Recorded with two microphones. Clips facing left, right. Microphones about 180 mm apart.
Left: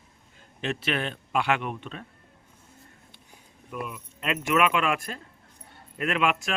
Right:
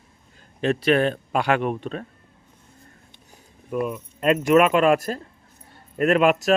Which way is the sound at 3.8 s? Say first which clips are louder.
Right 11 dB; 45° right (ahead or behind).